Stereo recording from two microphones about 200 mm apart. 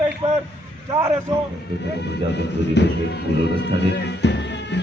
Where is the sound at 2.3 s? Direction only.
60° left (ahead or behind).